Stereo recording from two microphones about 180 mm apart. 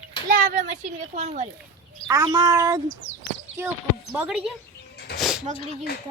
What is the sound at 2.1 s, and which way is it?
Speech, 15° right (ahead or behind).